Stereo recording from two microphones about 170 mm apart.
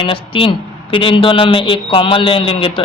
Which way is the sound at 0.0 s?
30° left (ahead or behind).